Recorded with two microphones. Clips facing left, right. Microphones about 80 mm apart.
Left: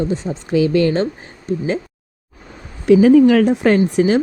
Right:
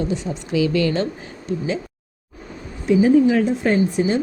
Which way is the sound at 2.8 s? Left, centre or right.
Left.